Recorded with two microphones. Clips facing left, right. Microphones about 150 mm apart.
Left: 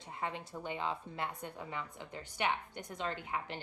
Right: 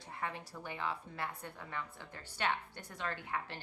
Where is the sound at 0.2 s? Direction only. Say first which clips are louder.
Left 2 dB; 20° left (ahead or behind).